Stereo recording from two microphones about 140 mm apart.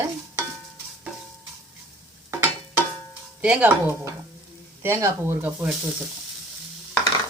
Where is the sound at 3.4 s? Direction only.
10° right (ahead or behind).